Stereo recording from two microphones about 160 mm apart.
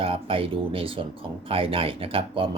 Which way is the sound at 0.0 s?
35° right (ahead or behind).